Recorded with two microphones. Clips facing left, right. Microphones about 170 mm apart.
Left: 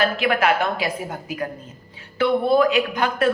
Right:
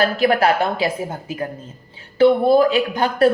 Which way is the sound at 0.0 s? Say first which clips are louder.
Right 4 dB; 35° right (ahead or behind).